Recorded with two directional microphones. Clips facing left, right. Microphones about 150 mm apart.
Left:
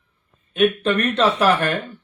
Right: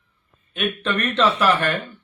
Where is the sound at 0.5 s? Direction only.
40° left (ahead or behind).